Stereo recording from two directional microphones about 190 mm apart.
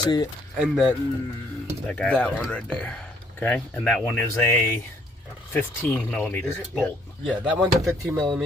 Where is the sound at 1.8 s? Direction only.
5° left (ahead or behind).